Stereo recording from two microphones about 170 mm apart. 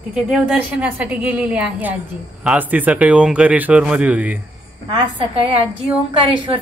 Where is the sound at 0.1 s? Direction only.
5° right (ahead or behind).